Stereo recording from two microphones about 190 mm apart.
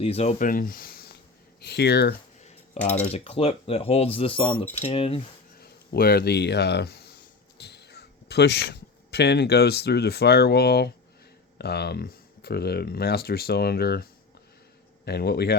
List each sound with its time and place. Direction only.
0.0 s speech: 30° left (ahead or behind); by 2.1 s 60° left (ahead or behind)
2.8 s speech: 35° left (ahead or behind)
5.5 s speech: 55° left (ahead or behind)